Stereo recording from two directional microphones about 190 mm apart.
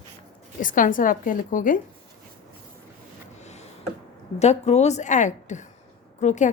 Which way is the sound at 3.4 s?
35° left (ahead or behind).